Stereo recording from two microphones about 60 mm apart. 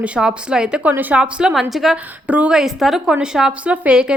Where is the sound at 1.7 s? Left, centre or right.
Centre.